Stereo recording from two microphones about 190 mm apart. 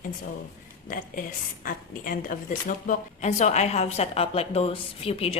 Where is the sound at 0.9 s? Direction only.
45° left (ahead or behind).